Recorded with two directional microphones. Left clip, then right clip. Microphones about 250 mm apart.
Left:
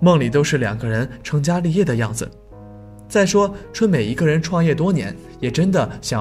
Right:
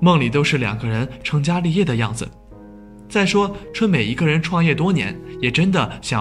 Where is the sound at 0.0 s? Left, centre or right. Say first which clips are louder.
Left 1 dB; left.